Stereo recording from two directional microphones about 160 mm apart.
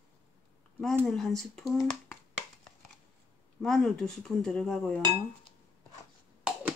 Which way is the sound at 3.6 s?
5° left (ahead or behind).